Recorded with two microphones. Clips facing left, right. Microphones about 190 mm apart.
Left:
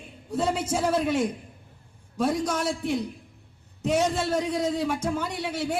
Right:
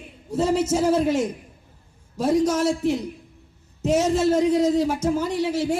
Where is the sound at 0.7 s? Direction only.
30° right (ahead or behind).